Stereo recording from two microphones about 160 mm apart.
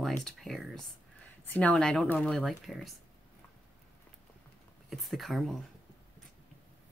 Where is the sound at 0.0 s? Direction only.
Centre (ahead or behind).